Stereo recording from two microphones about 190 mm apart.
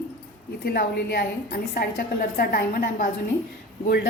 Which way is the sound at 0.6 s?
55° left (ahead or behind).